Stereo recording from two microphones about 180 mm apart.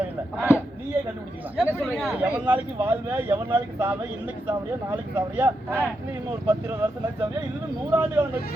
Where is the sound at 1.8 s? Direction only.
5° right (ahead or behind).